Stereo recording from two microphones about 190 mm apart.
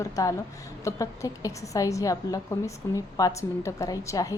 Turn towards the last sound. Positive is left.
turn(degrees=15)  # may be behind; listen again after turning